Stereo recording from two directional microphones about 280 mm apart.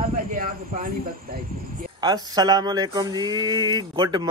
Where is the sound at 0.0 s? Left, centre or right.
Right.